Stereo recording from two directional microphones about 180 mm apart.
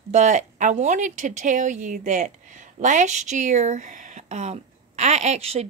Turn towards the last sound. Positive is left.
turn(degrees=-35)  # may be behind; listen again after turning